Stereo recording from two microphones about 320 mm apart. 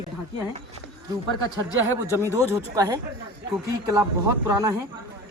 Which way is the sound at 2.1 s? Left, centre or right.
Centre.